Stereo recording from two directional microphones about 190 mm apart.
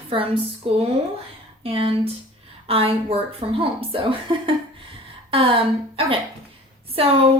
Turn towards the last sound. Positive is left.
turn(degrees=-30)  # may be behind; listen again after turning